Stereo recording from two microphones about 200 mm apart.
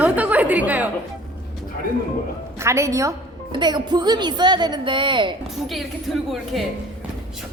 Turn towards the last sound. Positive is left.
turn(degrees=0)  # may be behind; listen again after turning